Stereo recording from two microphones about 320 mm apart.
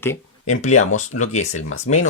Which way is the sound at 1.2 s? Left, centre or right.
Left.